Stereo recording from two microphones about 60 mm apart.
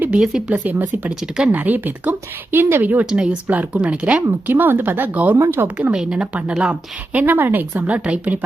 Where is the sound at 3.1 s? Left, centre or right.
Centre.